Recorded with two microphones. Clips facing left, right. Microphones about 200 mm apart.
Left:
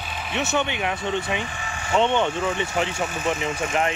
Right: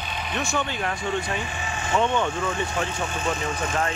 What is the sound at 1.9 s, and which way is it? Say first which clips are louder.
Speech: left 3 dB; 25° left (ahead or behind).